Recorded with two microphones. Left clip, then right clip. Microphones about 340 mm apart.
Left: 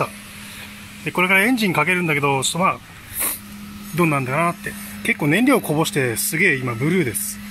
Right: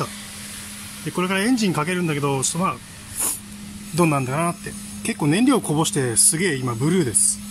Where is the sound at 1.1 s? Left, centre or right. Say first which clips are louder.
Left 6 dB; centre.